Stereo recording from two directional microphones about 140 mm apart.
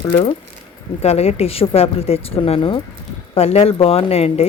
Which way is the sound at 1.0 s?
45° left (ahead or behind).